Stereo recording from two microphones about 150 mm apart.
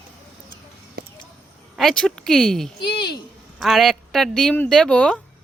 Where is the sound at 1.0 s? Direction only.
85° right.